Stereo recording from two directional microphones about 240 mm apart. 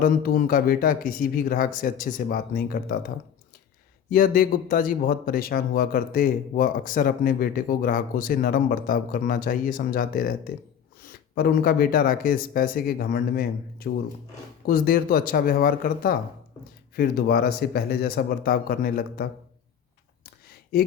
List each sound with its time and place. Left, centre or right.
0.0 s speech: left
4.1 s speech: left